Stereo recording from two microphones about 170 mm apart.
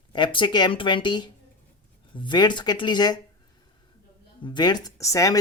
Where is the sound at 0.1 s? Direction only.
30° left (ahead or behind).